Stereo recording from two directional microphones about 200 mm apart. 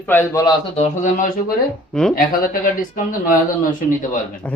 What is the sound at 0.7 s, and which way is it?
Speech, 40° left (ahead or behind).